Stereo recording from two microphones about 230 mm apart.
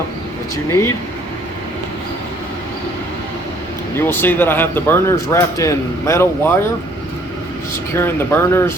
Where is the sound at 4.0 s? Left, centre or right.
Centre.